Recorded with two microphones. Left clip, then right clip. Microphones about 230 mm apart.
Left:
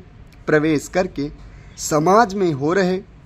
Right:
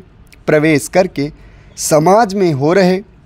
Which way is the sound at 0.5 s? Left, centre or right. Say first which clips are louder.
Right 6 dB; right.